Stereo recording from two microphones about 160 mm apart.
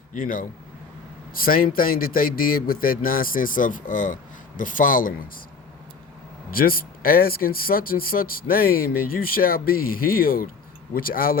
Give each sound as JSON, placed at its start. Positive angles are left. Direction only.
{"t": 0.1, "sound": "speech", "side_deg": 60}
{"t": 6.5, "sound": "speech", "side_deg": 65}